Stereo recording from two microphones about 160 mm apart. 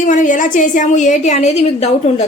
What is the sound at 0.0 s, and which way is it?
A woman's voice, 55° left (ahead or behind).